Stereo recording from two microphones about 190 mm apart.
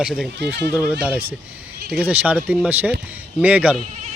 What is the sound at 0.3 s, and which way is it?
Speech, 60° right (ahead or behind).